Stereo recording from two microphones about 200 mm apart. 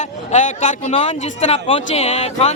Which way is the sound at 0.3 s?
40° left (ahead or behind).